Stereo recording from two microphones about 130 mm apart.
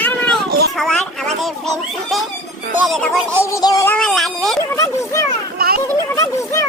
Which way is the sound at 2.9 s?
Centre (ahead or behind).